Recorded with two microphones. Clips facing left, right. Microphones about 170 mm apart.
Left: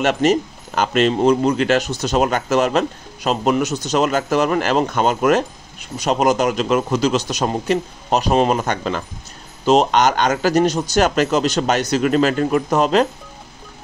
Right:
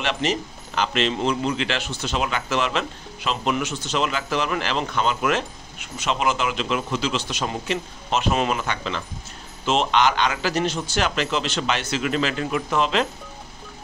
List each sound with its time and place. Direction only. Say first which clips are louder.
0.0 s speech: left 8 dB; 45° left (ahead or behind)